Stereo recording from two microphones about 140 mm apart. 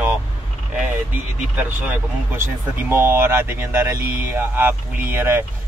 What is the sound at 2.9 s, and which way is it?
Speech, 15° right (ahead or behind).